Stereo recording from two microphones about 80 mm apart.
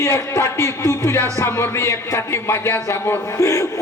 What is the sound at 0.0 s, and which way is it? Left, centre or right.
A man's voice, left.